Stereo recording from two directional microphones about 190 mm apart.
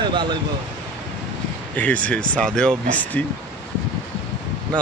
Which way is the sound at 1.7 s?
5° left (ahead or behind).